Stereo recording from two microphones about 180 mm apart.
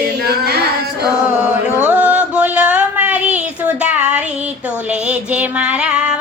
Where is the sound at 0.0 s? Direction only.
65° right (ahead or behind).